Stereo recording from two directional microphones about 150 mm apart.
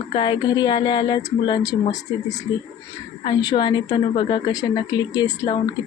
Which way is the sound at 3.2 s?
30° left (ahead or behind).